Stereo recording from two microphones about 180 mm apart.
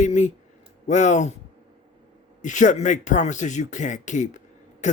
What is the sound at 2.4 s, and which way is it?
Speech, 45° left (ahead or behind).